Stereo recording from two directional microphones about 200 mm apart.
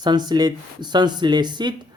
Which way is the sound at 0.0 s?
20° right (ahead or behind).